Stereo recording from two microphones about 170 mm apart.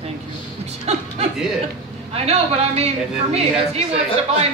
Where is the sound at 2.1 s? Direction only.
40° right (ahead or behind).